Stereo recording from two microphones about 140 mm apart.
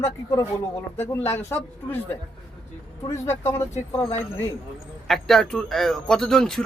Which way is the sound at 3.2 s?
15° left (ahead or behind).